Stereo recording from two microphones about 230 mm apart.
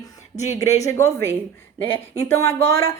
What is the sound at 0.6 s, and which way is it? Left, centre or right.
Speech, centre.